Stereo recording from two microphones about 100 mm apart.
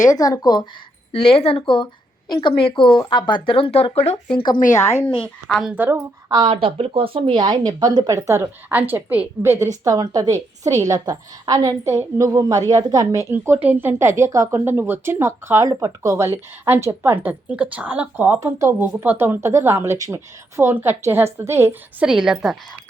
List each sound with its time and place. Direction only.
0.0 s speech: 40° left (ahead or behind)
1.1 s speech: 70° left (ahead or behind); by 4.2 s 90° left
4.7 s a woman's voice: 30° left (ahead or behind)
5.5 s a woman's voice: centre (ahead or behind)
5.7 s a woman's voice: 20° right (ahead or behind)
6.4 s speech: 65° right (ahead or behind); by 8.4 s 30° right (ahead or behind)
8.7 s a woman's voice: 20° right (ahead or behind); by 13.2 s 35° right (ahead or behind)
13.3 s speech: 20° right (ahead or behind)
14.6 s speech: 20° right (ahead or behind)
22.0 s a woman's voice: 5° right (ahead or behind)